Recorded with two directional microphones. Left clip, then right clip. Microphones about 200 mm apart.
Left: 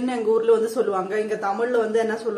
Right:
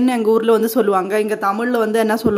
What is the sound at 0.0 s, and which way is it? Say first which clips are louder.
A man's voice: right 5 dB; 45° right (ahead or behind).